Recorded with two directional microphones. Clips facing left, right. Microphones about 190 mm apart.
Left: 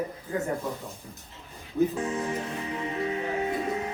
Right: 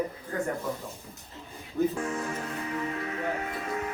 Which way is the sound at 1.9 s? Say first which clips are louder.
Left 2 dB; 20° left (ahead or behind).